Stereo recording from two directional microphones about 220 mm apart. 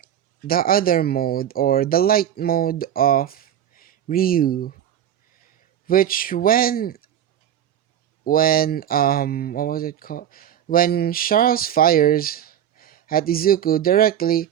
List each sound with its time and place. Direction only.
0.0 s speech: 40° left (ahead or behind)
5.8 s speech: 40° left (ahead or behind)
8.2 s speech: 40° left (ahead or behind)